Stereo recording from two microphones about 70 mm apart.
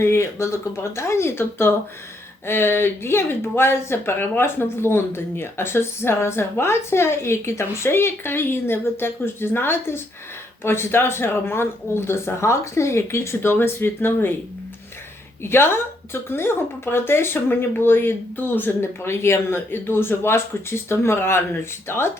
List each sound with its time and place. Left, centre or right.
0.0 s speech: left
15.4 s speech: left